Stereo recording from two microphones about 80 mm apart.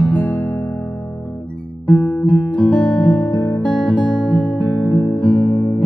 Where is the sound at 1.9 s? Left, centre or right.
Centre.